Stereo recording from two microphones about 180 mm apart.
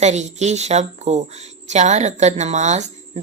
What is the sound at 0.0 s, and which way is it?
Speech, 40° right (ahead or behind).